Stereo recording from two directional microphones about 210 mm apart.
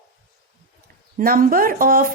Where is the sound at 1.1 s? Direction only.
40° right (ahead or behind).